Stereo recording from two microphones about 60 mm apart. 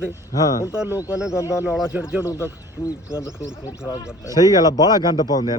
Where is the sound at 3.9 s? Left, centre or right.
Left.